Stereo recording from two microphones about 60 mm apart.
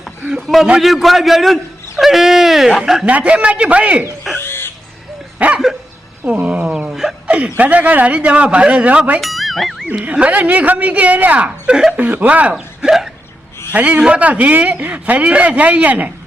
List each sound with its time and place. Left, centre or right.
0.3 s a man's voice: centre
3.1 s speech: right
4.4 s owl: left
5.4 s dog: right
6.2 s speech: right
7.3 s chuckle: right
7.5 s speech: right
9.2 s music: centre
10.0 s speech: right
12.5 s speech: centre
13.7 s speech: right